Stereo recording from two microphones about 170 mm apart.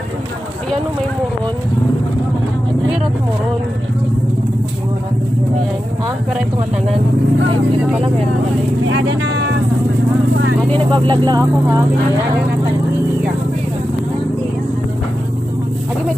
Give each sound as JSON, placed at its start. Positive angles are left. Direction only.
{"t": 8.9, "sound": "speech", "side_deg": -90}
{"t": 10.9, "sound": "speech", "side_deg": -25}